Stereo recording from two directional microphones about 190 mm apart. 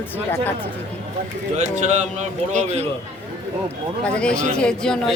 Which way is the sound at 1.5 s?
40° right (ahead or behind).